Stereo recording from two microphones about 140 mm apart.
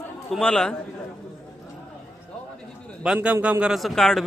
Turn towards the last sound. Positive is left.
turn(degrees=0)  # may be behind; listen again after turning